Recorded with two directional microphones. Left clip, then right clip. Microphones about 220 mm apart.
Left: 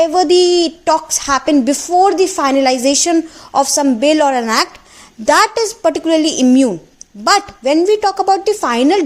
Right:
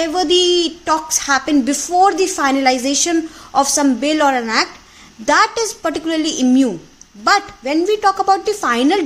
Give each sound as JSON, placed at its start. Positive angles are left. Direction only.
{"t": 0.0, "sound": "a woman's voice", "side_deg": 25}